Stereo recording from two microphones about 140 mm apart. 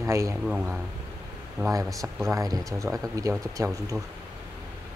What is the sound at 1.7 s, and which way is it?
Speech, 25° right (ahead or behind).